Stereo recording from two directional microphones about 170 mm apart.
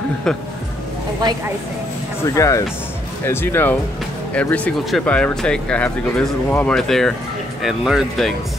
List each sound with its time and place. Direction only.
2.2 s speech: 20° left (ahead or behind); by 8.3 s centre (ahead or behind)